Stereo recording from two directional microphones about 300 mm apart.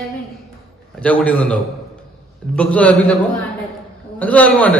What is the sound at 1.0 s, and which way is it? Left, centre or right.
A man's voice, centre.